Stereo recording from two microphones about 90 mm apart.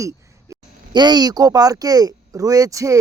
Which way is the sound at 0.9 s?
55° right (ahead or behind).